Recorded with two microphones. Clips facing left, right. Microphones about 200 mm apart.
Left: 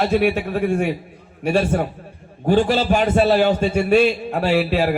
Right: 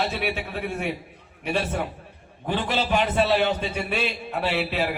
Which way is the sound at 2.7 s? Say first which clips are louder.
Left 6 dB; 45° left (ahead or behind).